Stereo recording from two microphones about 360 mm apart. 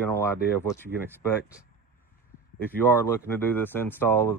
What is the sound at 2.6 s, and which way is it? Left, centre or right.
Speech, centre.